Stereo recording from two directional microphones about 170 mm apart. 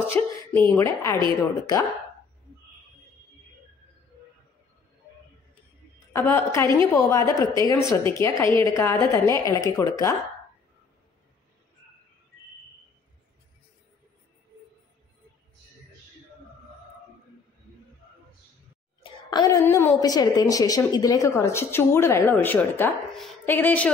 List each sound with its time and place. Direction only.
0.2 s a woman's voice: 10° left (ahead or behind)
6.1 s a woman's voice: 15° left (ahead or behind)
19.3 s a woman's voice: 20° left (ahead or behind)